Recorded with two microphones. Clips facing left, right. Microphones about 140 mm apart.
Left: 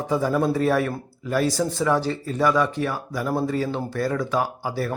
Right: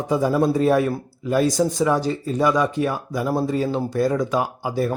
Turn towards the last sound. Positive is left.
turn(degrees=-20)  # may be behind; listen again after turning